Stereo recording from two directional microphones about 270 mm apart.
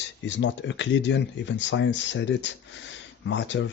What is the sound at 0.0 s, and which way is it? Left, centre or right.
Speech, left.